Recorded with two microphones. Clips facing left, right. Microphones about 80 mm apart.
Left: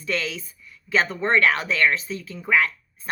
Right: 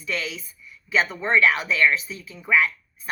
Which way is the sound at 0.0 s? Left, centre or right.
Left.